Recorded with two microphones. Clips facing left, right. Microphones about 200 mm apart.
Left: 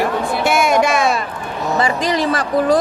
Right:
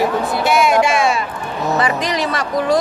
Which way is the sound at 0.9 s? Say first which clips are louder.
Even; 40° left (ahead or behind).